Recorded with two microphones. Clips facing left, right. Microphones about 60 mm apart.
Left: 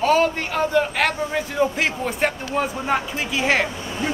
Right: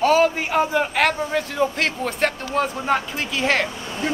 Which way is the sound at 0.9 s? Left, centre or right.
Centre.